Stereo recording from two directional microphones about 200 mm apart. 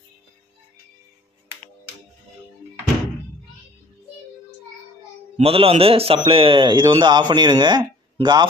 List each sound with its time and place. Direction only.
5.4 s a man's voice: 30° right (ahead or behind)